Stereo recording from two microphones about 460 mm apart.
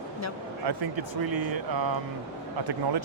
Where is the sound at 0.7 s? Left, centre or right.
Right.